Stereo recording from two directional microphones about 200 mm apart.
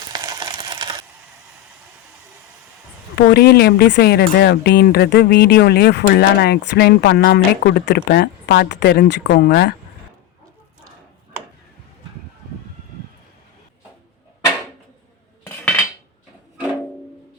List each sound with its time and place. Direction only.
0.1 s a sound: 20° right (ahead or behind)
3.2 s speech: 55° left (ahead or behind)
15.4 s cutlery: 10° left (ahead or behind)